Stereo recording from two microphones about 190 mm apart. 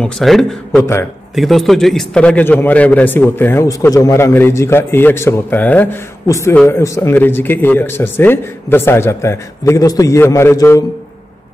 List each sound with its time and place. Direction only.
0.0 s a man's voice: centre (ahead or behind)